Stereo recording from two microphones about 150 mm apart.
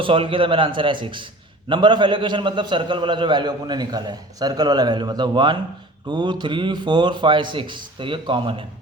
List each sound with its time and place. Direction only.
0.0 s a man's voice: 35° right (ahead or behind)